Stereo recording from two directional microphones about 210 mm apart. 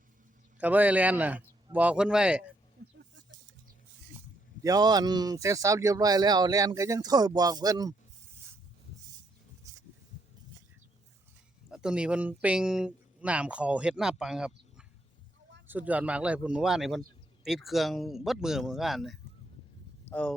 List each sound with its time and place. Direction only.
0.6 s speech: 5° right (ahead or behind)
4.6 s speech: 20° right (ahead or behind)
11.7 s speech: 5° right (ahead or behind)